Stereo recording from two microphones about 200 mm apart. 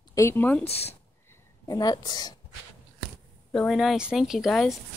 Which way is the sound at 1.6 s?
20° left (ahead or behind).